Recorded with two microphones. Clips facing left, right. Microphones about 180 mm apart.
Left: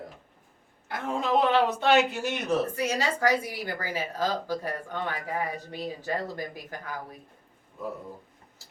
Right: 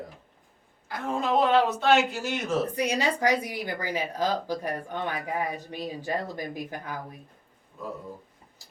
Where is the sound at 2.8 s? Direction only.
20° right (ahead or behind).